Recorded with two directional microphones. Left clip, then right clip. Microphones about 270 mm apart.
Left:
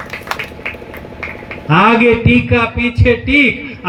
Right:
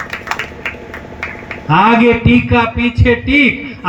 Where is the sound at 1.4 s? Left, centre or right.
Right.